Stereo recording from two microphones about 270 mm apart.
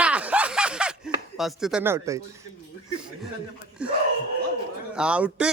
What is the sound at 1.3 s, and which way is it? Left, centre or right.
Speech, centre.